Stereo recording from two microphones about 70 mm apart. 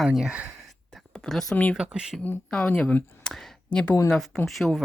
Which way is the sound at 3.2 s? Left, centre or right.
Centre.